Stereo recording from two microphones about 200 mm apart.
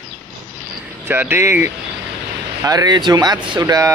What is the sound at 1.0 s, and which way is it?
A man's voice, 10° right (ahead or behind).